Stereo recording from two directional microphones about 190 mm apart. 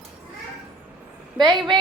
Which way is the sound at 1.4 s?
20° right (ahead or behind).